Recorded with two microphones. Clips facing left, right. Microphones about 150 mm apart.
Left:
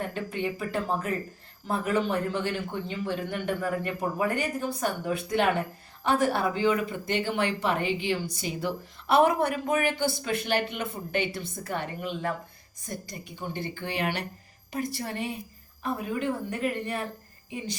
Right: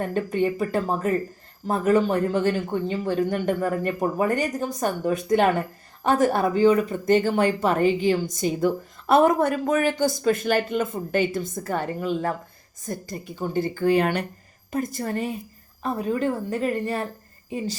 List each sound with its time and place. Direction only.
0.1 s speech: 45° right (ahead or behind)
13.4 s a woman's voice: 40° right (ahead or behind)